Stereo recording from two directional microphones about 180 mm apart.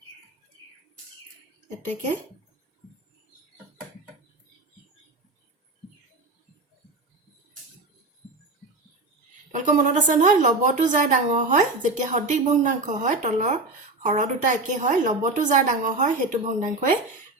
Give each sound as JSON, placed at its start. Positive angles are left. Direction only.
{"t": 1.8, "sound": "a woman's voice", "side_deg": -40}
{"t": 9.6, "sound": "a woman's voice", "side_deg": -45}